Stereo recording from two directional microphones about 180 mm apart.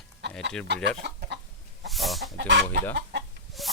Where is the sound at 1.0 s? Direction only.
75° right (ahead or behind).